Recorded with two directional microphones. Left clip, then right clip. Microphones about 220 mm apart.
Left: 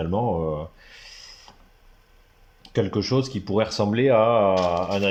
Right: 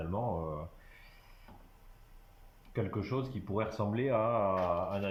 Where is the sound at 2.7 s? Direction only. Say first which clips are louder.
Left 13 dB; 35° left (ahead or behind).